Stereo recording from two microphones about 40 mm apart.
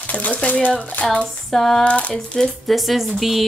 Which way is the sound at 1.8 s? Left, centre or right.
Left.